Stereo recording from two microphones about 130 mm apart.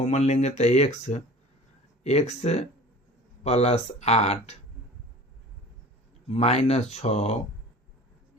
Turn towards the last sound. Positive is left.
turn(degrees=55)  # may be behind; listen again after turning